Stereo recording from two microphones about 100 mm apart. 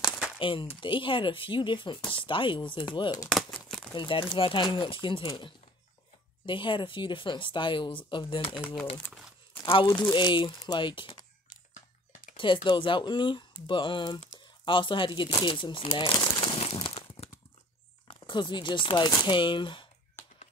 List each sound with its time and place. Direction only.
0.4 s speech: 60° left (ahead or behind)
3.5 s a sound: 5° left (ahead or behind)
3.9 s speech: 60° left (ahead or behind)
9.7 s speech: 55° left (ahead or behind)
12.4 s speech: 55° left (ahead or behind)
16.5 s a sound: 90° left
18.0 s speech: 55° left (ahead or behind)